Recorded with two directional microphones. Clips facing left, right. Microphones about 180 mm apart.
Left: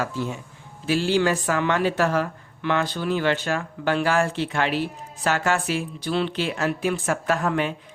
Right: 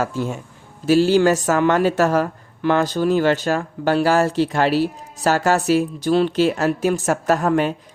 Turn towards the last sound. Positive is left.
turn(degrees=-40)  # may be behind; listen again after turning